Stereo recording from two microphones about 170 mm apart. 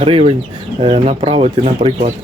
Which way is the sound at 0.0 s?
35° right (ahead or behind).